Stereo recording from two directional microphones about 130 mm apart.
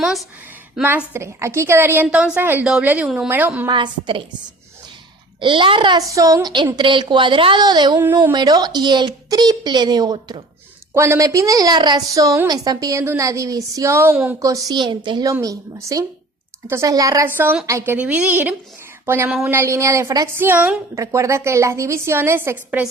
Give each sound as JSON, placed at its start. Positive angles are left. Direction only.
{"t": 0.0, "sound": "a woman's voice", "side_deg": 0}
{"t": 0.8, "sound": "a woman's voice", "side_deg": -15}
{"t": 3.7, "sound": "a woman's voice", "side_deg": -40}
{"t": 5.4, "sound": "a woman's voice", "side_deg": -40}
{"t": 7.9, "sound": "a woman's voice", "side_deg": -20}
{"t": 8.2, "sound": "a woman's voice", "side_deg": -35}
{"t": 10.9, "sound": "a woman's voice", "side_deg": -20}
{"t": 15.3, "sound": "a woman's voice", "side_deg": -25}
{"t": 17.2, "sound": "a woman's voice", "side_deg": -15}
{"t": 17.9, "sound": "a woman's voice", "side_deg": -10}
{"t": 19.0, "sound": "a sound", "side_deg": -20}
{"t": 19.5, "sound": "a woman's voice", "side_deg": -20}
{"t": 20.9, "sound": "a woman's voice", "side_deg": -25}